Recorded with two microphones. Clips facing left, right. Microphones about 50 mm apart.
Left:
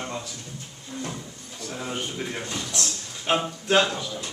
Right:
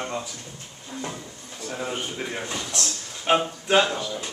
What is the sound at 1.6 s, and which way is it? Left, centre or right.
A man's voice, centre.